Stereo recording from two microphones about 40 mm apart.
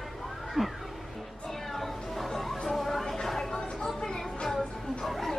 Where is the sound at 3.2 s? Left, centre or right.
Centre.